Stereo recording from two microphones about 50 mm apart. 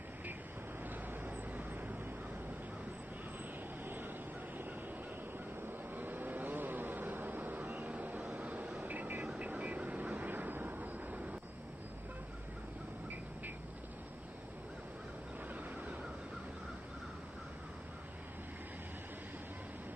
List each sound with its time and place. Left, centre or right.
0.8 s vehicle: right
3.8 s vehicle: right
5.9 s vehicle: right